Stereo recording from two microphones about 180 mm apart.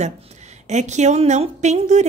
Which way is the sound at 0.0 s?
40° right (ahead or behind).